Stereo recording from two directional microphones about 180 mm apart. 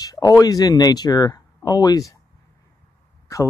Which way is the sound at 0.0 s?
20° left (ahead or behind).